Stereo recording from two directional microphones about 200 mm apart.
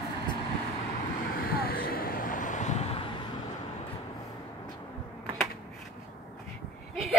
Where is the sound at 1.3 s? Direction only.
50° left (ahead or behind); by 3.1 s 30° left (ahead or behind).